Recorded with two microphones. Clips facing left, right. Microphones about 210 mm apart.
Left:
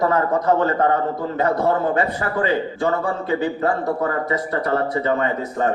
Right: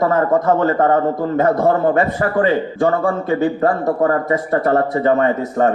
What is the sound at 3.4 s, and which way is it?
A man's voice, 45° right (ahead or behind).